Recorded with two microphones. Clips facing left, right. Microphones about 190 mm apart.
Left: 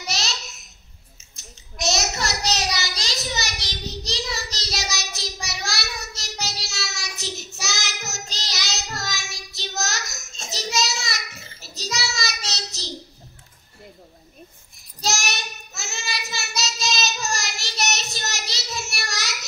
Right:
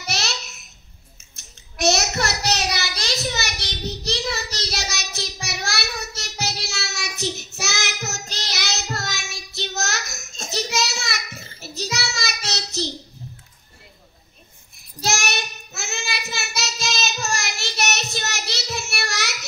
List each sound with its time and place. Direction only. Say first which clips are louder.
0.0 s babbling: right 2 dB; 60° right (ahead or behind)
1.3 s a sound: left 1 dB; 60° right (ahead or behind)
11.6 s child singing: right 2 dB; 60° right (ahead or behind)
15.0 s child singing: right 2 dB; 60° right (ahead or behind)